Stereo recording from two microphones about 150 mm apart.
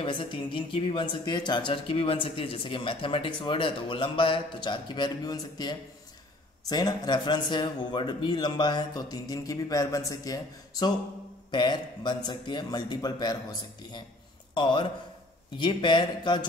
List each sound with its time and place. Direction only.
0.0 s speech: 35° left (ahead or behind)